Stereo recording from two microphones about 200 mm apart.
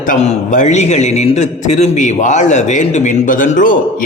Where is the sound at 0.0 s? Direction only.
40° left (ahead or behind).